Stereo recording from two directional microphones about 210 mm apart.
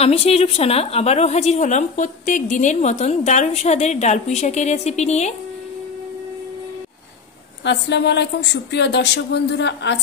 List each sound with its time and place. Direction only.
0.0 s a woman's voice: 30° left (ahead or behind)
7.6 s a woman's voice: 55° left (ahead or behind)